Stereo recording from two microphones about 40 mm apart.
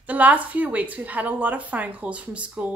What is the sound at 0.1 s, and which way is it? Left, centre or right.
A woman's voice, right.